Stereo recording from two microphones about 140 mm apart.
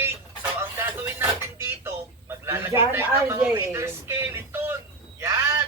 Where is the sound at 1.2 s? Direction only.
15° right (ahead or behind).